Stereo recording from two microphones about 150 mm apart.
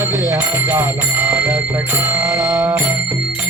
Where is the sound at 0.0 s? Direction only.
15° right (ahead or behind).